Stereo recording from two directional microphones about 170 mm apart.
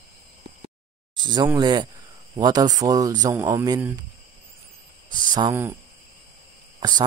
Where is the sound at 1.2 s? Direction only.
25° right (ahead or behind).